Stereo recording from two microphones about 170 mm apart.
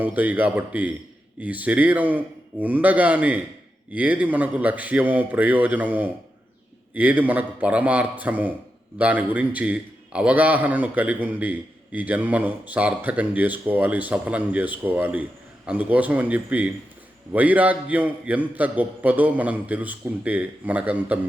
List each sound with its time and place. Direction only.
0.0 s a man's voice: 10° right (ahead or behind)